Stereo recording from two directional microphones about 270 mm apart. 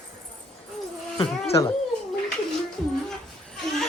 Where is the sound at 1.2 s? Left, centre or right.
Centre.